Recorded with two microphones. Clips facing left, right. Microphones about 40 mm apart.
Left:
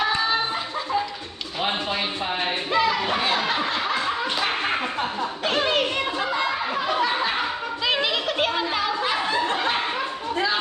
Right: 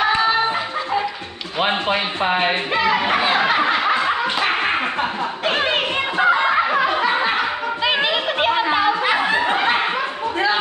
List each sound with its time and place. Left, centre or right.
0.0 s a sound: right
1.6 s speech: right
3.2 s snicker: right
4.0 s a sound: right
5.5 s music: right
6.5 s snicker: right
6.9 s snicker: right
7.8 s a sound: right
8.7 s snicker: right